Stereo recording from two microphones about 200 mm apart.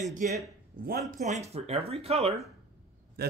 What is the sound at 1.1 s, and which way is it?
Speech, 35° right (ahead or behind).